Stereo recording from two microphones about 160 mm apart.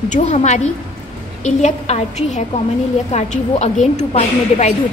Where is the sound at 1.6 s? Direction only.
45° left (ahead or behind).